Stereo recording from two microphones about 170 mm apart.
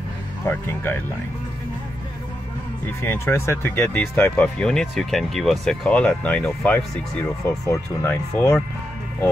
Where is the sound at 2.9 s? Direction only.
15° left (ahead or behind).